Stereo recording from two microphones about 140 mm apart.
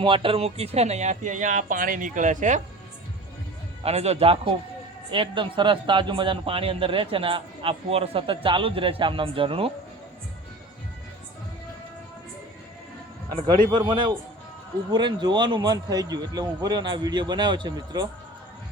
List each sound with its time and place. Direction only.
0.0 s speech: 40° right (ahead or behind); by 2.6 s 65° right (ahead or behind)
3.8 s a man's voice: 50° right (ahead or behind)
13.7 s a man's voice: 35° right (ahead or behind)